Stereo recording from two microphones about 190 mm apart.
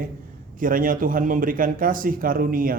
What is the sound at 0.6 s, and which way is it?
A man's voice, 45° right (ahead or behind).